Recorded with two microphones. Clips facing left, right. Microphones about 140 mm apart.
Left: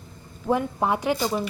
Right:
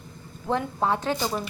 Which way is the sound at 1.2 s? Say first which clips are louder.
Left 3 dB; centre (ahead or behind).